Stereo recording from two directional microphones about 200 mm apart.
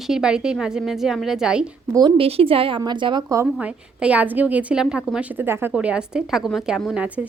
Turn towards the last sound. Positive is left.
turn(degrees=-5)  # may be behind; listen again after turning